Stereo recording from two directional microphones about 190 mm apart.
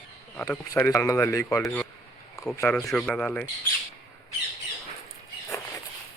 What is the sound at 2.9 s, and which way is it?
Speech, 5° left (ahead or behind).